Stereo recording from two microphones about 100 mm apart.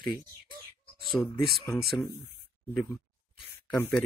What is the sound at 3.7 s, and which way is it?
Speech, 15° left (ahead or behind).